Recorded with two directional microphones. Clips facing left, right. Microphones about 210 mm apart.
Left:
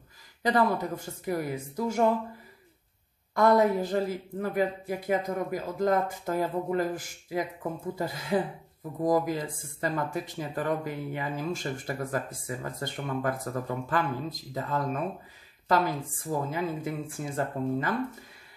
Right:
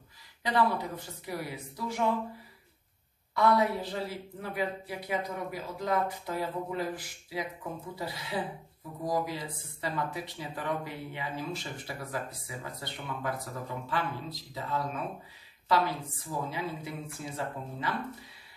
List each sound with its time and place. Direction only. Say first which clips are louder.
0.4 s speech: left 3 dB; 45° left (ahead or behind)
3.3 s speech: left 4 dB; 45° left (ahead or behind)